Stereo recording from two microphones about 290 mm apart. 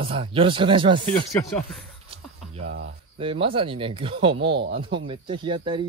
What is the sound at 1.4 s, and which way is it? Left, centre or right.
Speech, centre.